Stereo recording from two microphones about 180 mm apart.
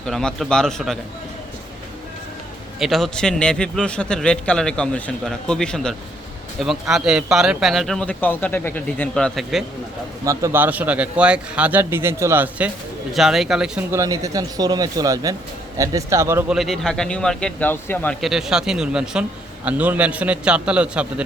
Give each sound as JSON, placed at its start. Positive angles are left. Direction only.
{"t": 0.0, "sound": "a man's voice", "side_deg": 5}
{"t": 2.7, "sound": "a man's voice", "side_deg": 0}
{"t": 10.2, "sound": "a man's voice", "side_deg": -15}
{"t": 13.9, "sound": "a man's voice", "side_deg": -15}
{"t": 16.6, "sound": "a man's voice", "side_deg": 0}